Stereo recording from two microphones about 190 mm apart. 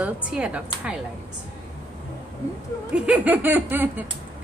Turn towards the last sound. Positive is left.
turn(degrees=-10)  # may be behind; listen again after turning